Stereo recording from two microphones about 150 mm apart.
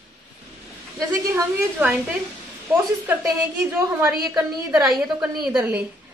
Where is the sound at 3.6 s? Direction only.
15° right (ahead or behind).